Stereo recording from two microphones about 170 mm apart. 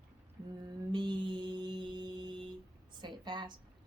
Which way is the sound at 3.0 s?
25° right (ahead or behind).